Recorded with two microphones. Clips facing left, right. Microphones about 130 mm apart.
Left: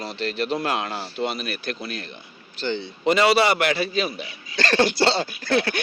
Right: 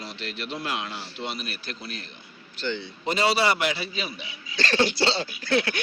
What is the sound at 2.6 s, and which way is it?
Speech, 35° left (ahead or behind).